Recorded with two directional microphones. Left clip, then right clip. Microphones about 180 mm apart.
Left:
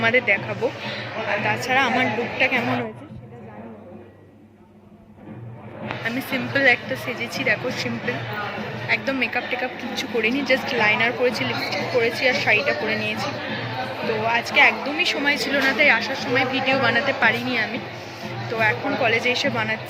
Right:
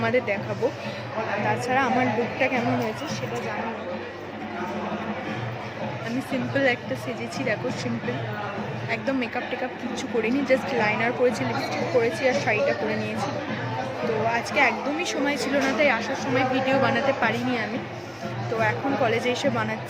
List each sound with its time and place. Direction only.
0.0 s a woman's voice: 10° right (ahead or behind)
1.5 s a woman's voice: 5° right (ahead or behind)
6.3 s a woman's voice: 10° right (ahead or behind)
8.9 s a woman's voice: 15° right (ahead or behind)
14.3 s a woman's voice: 10° right (ahead or behind)